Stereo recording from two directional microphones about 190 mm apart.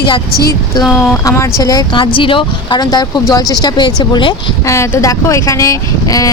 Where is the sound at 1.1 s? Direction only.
15° left (ahead or behind).